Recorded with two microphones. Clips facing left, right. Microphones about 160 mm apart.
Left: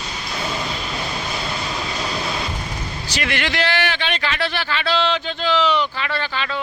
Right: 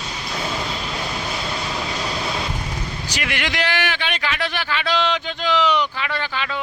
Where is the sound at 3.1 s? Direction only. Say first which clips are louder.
Left 3 dB; 10° right (ahead or behind).